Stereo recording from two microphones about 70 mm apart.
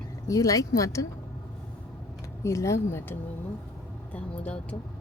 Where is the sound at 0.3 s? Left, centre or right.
Left.